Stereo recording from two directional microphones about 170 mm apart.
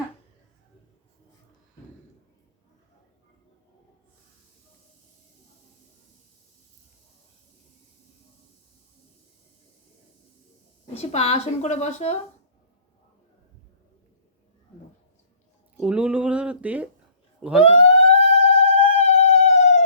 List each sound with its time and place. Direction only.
10.9 s a woman's voice: 40° left (ahead or behind)
15.8 s speech: 5° right (ahead or behind)
17.6 s a sound: 35° left (ahead or behind)